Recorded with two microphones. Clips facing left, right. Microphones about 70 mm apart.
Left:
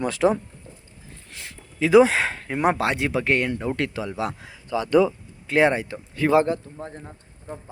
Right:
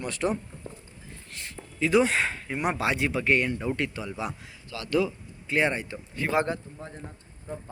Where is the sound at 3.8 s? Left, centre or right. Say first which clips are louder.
Left 5 dB; left.